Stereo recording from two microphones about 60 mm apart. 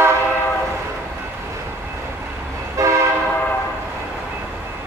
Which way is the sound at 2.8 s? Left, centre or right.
Right.